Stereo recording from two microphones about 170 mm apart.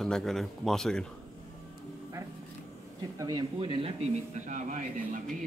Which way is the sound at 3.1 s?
20° right (ahead or behind).